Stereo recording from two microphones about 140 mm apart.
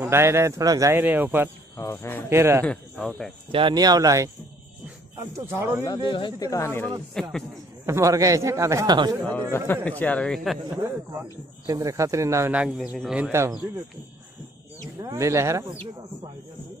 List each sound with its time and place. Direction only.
0.0 s speech: 20° right (ahead or behind)
1.8 s speech: 20° left (ahead or behind)
2.2 s speech: 15° right (ahead or behind)
2.6 s speech: 10° left (ahead or behind)
3.5 s speech: 30° right (ahead or behind)
6.0 s speech: 35° left (ahead or behind)
6.5 s speech: 20° left (ahead or behind)
7.2 s speech: 5° left (ahead or behind)
7.8 s speech: 20° right (ahead or behind)
9.2 s speech: 10° left (ahead or behind)
11.6 s speech: 25° right (ahead or behind)
12.5 s speech: 5° right (ahead or behind)
13.1 s speech: 15° right (ahead or behind)
15.0 s speech: 20° right (ahead or behind)